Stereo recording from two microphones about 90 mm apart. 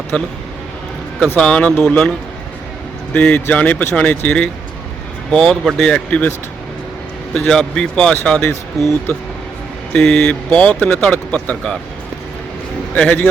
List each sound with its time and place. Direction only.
0.1 s speech: 15° left (ahead or behind)
1.4 s speech: 10° left (ahead or behind)
5.3 s speech: 5° left (ahead or behind)
5.9 s speech: 15° left (ahead or behind)
7.3 s speech: 5° left (ahead or behind)
9.9 s speech: 10° left (ahead or behind)
12.9 s speech: 15° left (ahead or behind)